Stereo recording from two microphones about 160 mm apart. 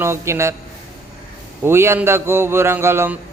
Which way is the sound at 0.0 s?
15° right (ahead or behind).